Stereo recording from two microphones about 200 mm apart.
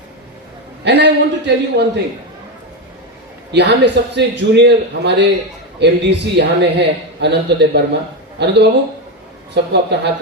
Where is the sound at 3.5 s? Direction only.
60° right (ahead or behind).